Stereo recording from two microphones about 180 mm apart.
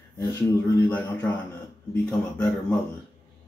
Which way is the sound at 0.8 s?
10° left (ahead or behind).